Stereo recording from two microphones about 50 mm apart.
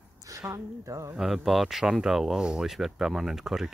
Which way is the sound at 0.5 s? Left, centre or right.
Right.